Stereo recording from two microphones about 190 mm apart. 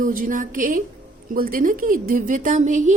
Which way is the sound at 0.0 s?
45° right (ahead or behind).